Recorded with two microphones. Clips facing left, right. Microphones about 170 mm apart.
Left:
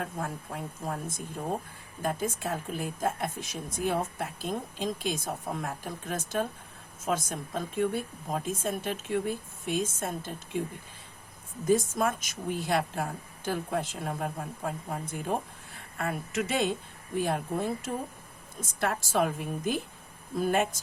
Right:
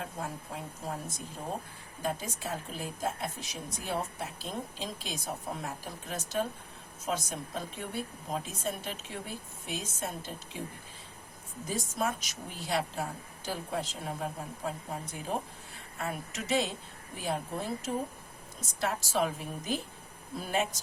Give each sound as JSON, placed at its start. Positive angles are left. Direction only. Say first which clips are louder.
{"t": 0.0, "sound": "a woman's voice", "louder": "left 3 dB", "side_deg": 55}
{"t": 11.7, "sound": "a woman's voice", "louder": "left 7 dB", "side_deg": 50}